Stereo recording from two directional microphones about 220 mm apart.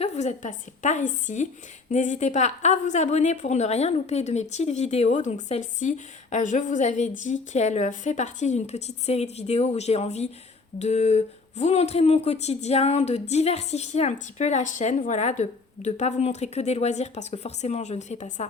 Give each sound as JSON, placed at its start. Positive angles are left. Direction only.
{"t": 0.0, "sound": "a woman's voice", "side_deg": 30}